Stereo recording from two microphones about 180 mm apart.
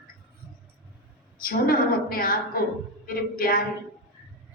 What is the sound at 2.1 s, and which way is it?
A woman's voice, 55° left (ahead or behind).